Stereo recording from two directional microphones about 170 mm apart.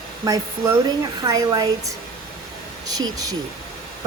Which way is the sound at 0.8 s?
20° right (ahead or behind).